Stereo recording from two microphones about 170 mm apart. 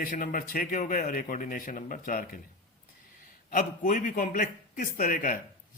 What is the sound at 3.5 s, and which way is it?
Speech, 50° left (ahead or behind).